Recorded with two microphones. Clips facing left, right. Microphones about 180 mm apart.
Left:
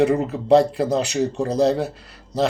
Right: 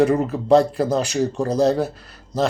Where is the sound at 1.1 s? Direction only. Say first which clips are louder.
Even; 35° right (ahead or behind).